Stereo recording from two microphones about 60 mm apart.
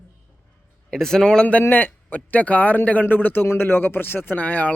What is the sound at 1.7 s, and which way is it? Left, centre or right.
Speech, left.